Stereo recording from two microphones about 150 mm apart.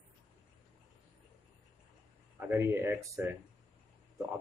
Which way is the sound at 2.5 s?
15° right (ahead or behind).